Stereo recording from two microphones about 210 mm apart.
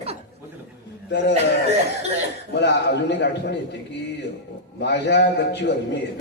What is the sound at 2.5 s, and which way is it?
A man's voice, 55° left (ahead or behind).